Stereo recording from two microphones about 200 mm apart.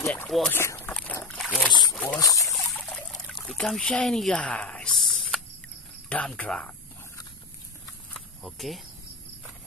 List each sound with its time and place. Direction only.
0.0 s speech: 10° left (ahead or behind)
0.3 s a sound: 5° left (ahead or behind)
1.7 s a sound: 20° left (ahead or behind)
2.1 s speech: 15° left (ahead or behind)
2.5 s trickle: centre (ahead or behind)
3.4 s speech: centre (ahead or behind)
8.1 s cricket: centre (ahead or behind)